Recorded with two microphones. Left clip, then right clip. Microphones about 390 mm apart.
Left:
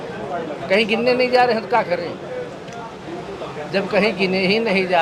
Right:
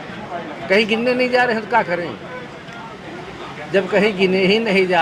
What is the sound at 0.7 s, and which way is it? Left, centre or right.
A man's voice, right.